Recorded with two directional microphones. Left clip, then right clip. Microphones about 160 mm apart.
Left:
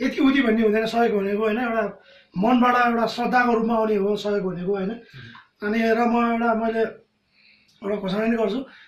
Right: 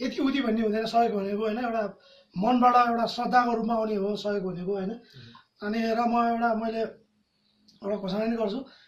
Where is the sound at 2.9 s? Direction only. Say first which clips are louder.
Left 3 dB; 20° right (ahead or behind).